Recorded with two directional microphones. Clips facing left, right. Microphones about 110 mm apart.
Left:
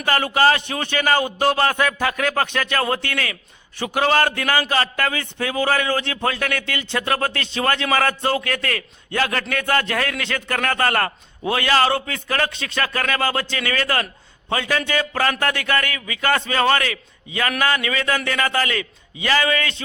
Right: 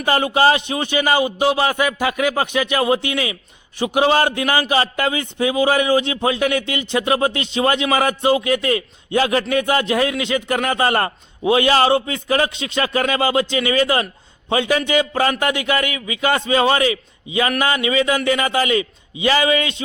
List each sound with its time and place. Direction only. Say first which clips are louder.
0.0 s a man's voice: right 2 dB; 20° right (ahead or behind)